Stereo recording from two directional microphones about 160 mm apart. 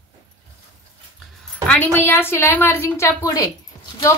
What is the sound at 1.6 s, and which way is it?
A woman's voice, 10° left (ahead or behind).